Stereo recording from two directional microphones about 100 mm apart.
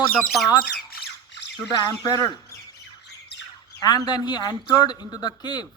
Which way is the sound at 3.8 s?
45° left (ahead or behind).